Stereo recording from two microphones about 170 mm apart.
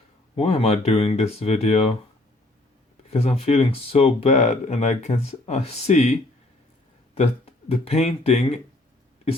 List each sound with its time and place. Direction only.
0.3 s speech: 35° left (ahead or behind)
3.1 s speech: 40° left (ahead or behind)